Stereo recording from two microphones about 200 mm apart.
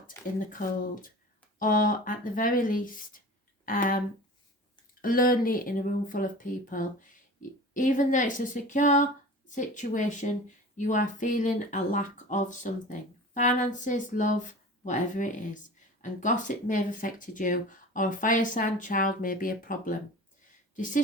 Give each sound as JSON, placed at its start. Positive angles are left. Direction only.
{"t": 0.1, "sound": "speech", "side_deg": 15}
{"t": 1.5, "sound": "speech", "side_deg": 45}
{"t": 5.0, "sound": "speech", "side_deg": 45}